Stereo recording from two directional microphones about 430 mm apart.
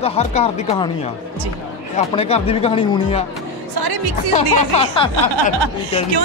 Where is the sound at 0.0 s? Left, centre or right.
Centre.